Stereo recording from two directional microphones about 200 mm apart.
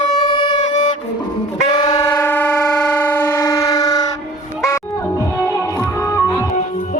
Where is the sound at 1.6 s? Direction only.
20° left (ahead or behind).